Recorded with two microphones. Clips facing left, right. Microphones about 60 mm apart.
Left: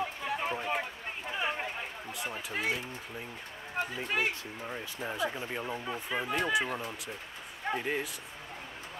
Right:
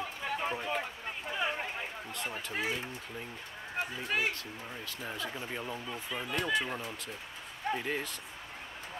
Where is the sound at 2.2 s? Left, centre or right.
Centre.